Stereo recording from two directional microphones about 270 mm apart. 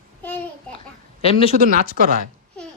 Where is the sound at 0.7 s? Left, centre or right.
Left.